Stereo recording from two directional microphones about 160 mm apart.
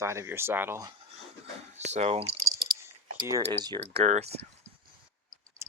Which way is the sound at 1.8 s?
45° right (ahead or behind).